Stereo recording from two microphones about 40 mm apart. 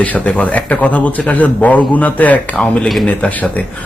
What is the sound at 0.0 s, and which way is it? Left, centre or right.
A man's voice, left.